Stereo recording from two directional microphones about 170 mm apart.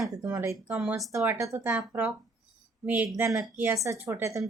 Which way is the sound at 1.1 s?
15° right (ahead or behind).